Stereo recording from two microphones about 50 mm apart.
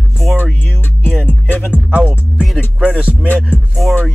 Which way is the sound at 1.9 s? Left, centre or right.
Right.